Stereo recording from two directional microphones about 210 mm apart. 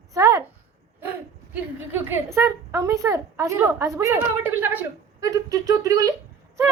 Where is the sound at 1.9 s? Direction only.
10° right (ahead or behind).